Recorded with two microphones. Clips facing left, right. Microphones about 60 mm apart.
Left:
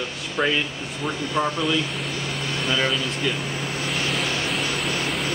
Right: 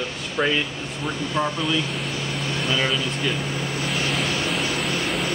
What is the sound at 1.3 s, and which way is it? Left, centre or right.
Speech, centre.